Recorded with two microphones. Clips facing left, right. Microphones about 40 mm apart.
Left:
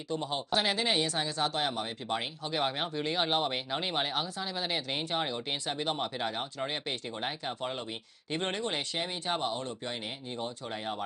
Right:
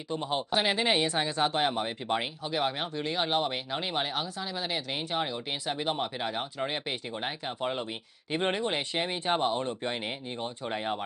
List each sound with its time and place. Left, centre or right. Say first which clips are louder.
0.1 s speech: right 2 dB; centre
2.4 s speech: right 1 dB; centre
5.7 s speech: right 3 dB; centre